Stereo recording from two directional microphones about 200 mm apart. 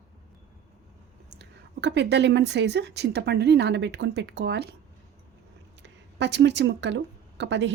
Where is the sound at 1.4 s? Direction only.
60° right (ahead or behind).